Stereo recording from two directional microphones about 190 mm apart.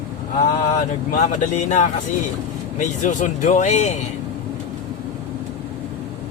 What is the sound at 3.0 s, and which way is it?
Speech, 40° left (ahead or behind).